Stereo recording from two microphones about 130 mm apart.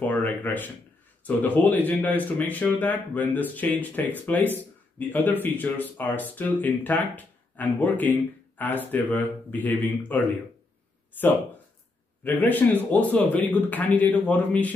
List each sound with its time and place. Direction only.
0.0 s speech: 15° left (ahead or behind)
12.2 s speech: 15° left (ahead or behind)